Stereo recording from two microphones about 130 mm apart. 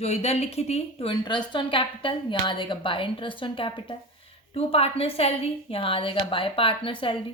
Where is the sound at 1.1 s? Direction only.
35° left (ahead or behind).